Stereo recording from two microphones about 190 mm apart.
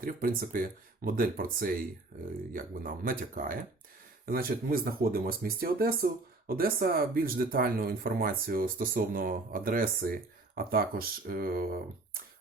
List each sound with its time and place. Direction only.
0.0 s speech: 50° right (ahead or behind)